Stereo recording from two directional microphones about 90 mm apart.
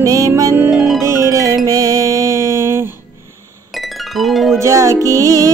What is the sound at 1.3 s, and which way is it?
Music, 35° right (ahead or behind).